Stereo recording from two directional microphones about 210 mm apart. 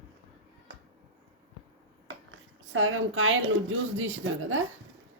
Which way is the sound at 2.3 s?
70° right (ahead or behind).